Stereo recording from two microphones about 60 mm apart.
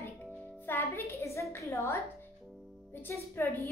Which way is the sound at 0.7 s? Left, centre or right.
Left.